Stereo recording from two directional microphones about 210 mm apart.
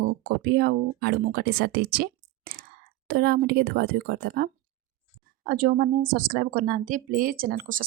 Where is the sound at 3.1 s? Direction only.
45° right (ahead or behind).